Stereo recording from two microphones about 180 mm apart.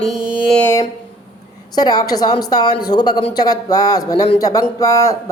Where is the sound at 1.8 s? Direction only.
20° left (ahead or behind).